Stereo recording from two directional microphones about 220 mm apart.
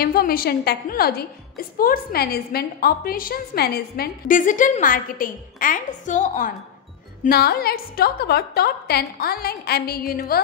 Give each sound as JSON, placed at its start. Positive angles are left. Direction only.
{"t": 0.0, "sound": "a woman's voice", "side_deg": 40}